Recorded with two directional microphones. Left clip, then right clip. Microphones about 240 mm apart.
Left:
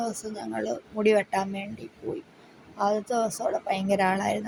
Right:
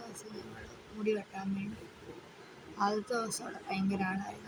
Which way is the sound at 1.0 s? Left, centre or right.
Left.